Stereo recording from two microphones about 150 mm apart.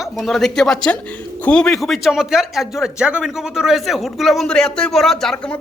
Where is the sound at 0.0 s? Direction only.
Centre (ahead or behind).